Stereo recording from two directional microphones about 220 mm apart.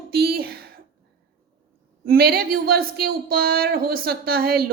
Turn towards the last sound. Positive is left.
turn(degrees=-45)  # may be behind; listen again after turning